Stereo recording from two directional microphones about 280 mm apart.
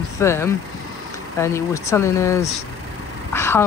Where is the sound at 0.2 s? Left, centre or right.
Centre.